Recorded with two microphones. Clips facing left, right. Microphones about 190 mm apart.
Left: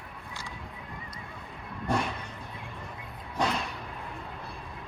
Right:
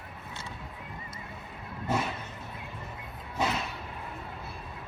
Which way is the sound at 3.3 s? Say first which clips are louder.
Left 1 dB; 5° right (ahead or behind).